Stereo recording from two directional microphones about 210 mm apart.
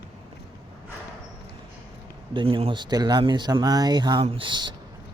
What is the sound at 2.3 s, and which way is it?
Speech, 25° right (ahead or behind).